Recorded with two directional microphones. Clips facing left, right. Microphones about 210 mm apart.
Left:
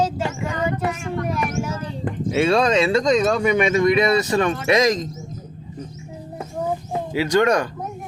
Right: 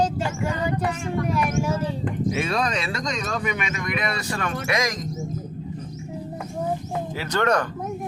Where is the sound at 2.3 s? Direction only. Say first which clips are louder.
Left 9 dB; 30° left (ahead or behind).